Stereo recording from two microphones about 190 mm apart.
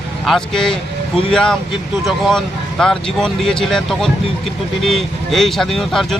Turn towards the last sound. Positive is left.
turn(degrees=0)  # may be behind; listen again after turning